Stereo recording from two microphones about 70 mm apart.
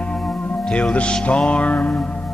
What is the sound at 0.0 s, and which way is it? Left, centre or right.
Music, centre.